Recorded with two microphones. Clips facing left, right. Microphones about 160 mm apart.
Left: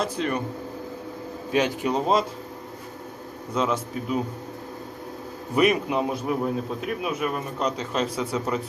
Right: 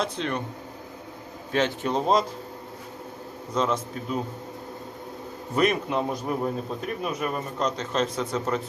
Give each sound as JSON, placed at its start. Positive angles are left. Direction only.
{"t": 0.0, "sound": "speech", "side_deg": 5}
{"t": 1.5, "sound": "speech", "side_deg": 15}
{"t": 3.5, "sound": "speech", "side_deg": 10}
{"t": 5.5, "sound": "speech", "side_deg": 10}